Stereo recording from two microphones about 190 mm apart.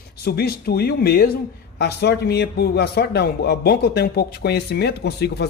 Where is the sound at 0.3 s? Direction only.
55° left (ahead or behind).